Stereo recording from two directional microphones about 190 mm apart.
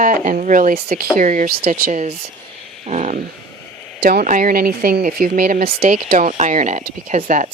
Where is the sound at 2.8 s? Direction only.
35° right (ahead or behind).